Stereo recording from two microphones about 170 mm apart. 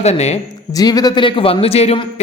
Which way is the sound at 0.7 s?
20° left (ahead or behind).